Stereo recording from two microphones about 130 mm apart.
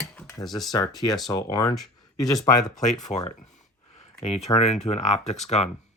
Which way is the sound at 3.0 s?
60° left (ahead or behind).